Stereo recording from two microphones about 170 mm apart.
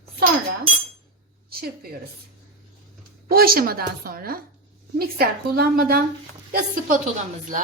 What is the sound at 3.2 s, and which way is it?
A woman's voice, 60° right (ahead or behind).